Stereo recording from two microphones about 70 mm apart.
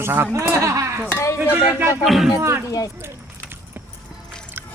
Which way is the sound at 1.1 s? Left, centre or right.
Left.